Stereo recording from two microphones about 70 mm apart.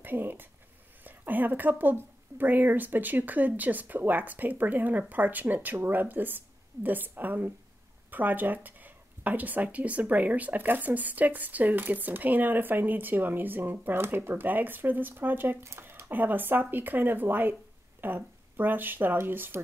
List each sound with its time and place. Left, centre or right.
0.0 s speech: right